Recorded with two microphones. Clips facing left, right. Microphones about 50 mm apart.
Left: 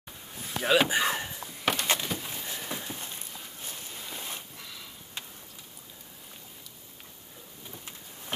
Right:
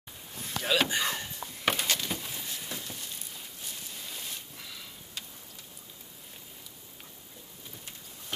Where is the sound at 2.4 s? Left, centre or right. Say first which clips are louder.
Left 3 dB; left.